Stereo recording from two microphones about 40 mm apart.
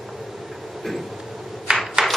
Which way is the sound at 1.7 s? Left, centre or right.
Right.